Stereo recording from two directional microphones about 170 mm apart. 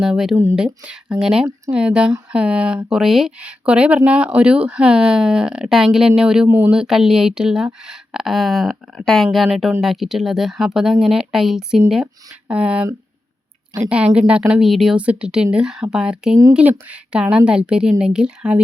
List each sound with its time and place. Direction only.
0.0 s a woman's voice: 5° right (ahead or behind)
13.9 s a woman's voice: 5° right (ahead or behind)